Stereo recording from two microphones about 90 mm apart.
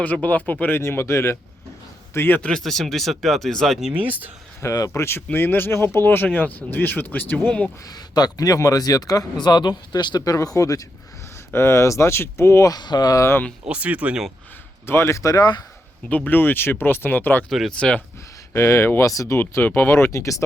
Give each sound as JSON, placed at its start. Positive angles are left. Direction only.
{"t": 0.0, "sound": "speech", "side_deg": 15}
{"t": 0.8, "sound": "speech", "side_deg": 30}
{"t": 2.4, "sound": "speech", "side_deg": 10}
{"t": 3.9, "sound": "speech", "side_deg": -20}
{"t": 4.6, "sound": "speech", "side_deg": 35}
{"t": 5.0, "sound": "speech", "side_deg": 25}
{"t": 7.9, "sound": "speech", "side_deg": 45}
{"t": 12.7, "sound": "speech", "side_deg": 50}
{"t": 13.7, "sound": "speech", "side_deg": -15}
{"t": 14.8, "sound": "speech", "side_deg": 30}
{"t": 16.0, "sound": "speech", "side_deg": 20}
{"t": 17.5, "sound": "speech", "side_deg": 5}
{"t": 18.5, "sound": "speech", "side_deg": 30}
{"t": 19.4, "sound": "speech", "side_deg": 25}